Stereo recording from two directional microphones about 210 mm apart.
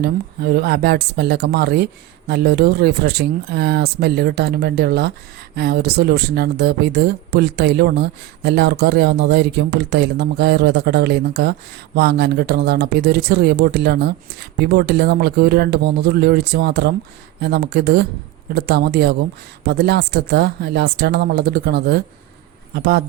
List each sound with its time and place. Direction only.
0.0 s speech: 50° right (ahead or behind)